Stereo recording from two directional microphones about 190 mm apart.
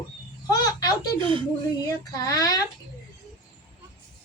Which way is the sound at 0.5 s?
20° left (ahead or behind).